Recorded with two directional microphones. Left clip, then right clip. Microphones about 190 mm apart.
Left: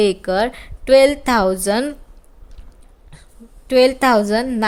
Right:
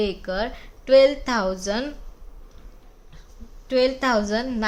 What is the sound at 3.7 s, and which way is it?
Speech, 45° left (ahead or behind).